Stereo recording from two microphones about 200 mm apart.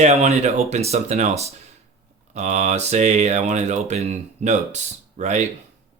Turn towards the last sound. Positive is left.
turn(degrees=-35)  # may be behind; listen again after turning